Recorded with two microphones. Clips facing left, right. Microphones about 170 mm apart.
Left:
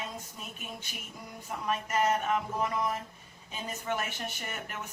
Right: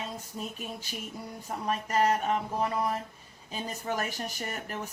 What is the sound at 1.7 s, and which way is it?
Speech, 35° right (ahead or behind).